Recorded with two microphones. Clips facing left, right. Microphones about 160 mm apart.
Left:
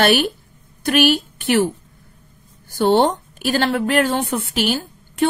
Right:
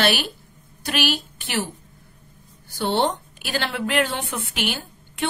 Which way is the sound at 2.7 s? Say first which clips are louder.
Left 7 dB; 50° left (ahead or behind).